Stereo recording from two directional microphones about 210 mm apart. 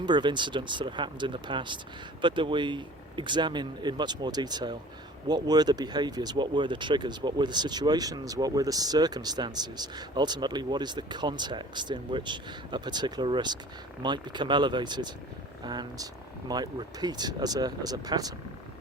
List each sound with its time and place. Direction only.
0.0 s speech: 20° right (ahead or behind)